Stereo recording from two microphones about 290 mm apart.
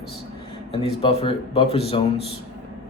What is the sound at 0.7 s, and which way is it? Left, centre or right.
Speech, centre.